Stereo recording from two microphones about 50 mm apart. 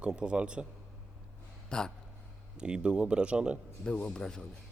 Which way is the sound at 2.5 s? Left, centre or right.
Centre.